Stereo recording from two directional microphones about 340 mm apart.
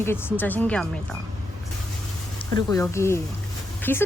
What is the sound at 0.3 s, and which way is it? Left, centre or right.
Speech, centre.